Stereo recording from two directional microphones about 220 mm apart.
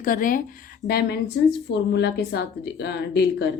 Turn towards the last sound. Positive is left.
turn(degrees=50)  # may be behind; listen again after turning